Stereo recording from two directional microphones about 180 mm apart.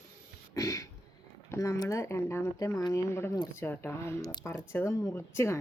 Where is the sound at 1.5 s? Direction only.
15° left (ahead or behind).